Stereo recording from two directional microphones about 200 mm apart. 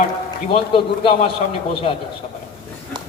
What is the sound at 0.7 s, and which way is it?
Speech, 25° left (ahead or behind).